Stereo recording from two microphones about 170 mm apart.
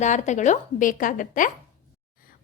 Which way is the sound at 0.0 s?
45° left (ahead or behind).